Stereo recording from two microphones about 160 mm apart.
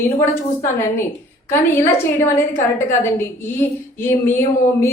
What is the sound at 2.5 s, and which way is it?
A woman's voice, 15° left (ahead or behind).